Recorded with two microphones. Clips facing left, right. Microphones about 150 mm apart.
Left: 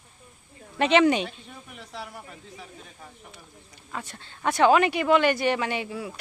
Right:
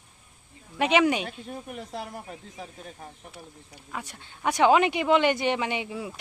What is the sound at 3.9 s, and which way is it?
Speech, 10° right (ahead or behind).